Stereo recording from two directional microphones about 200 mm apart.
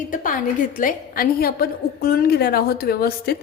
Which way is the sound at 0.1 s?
40° left (ahead or behind).